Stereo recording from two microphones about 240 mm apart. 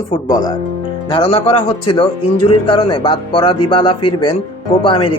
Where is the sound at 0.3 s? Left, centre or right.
Centre.